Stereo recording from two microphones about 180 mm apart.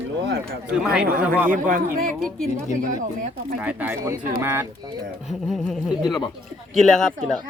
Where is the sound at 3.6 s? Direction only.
10° right (ahead or behind).